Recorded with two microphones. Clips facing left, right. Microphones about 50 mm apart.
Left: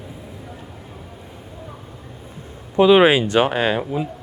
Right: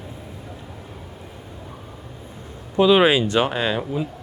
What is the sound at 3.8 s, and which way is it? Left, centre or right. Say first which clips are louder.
Speech: left 2 dB; centre.